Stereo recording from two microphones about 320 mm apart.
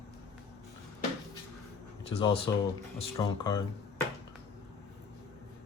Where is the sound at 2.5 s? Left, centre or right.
Centre.